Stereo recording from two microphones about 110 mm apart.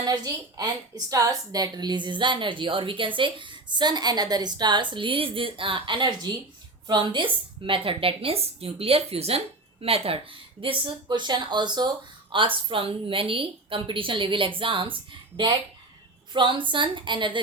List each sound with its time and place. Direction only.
0.0 s a woman's voice: 35° right (ahead or behind); by 10.2 s 60° right (ahead or behind)
10.6 s a woman's voice: 50° right (ahead or behind)
16.3 s a woman's voice: 45° right (ahead or behind)